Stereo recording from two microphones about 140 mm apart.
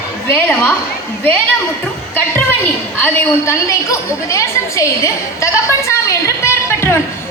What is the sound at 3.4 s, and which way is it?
A woman's voice, 20° left (ahead or behind).